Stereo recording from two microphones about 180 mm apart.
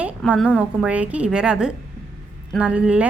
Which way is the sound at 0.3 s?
Centre (ahead or behind).